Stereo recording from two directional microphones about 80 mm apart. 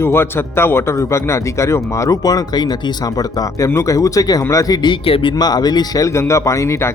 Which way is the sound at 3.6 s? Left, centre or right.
Left.